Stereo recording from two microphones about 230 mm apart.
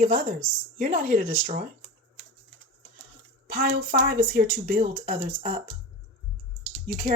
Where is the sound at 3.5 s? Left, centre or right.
Right.